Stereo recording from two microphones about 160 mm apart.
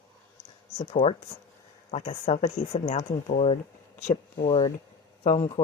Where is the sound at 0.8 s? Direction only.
45° left (ahead or behind).